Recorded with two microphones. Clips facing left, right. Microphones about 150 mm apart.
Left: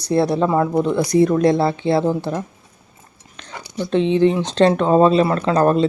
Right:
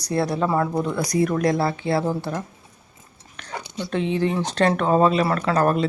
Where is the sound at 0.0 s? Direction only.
25° left (ahead or behind).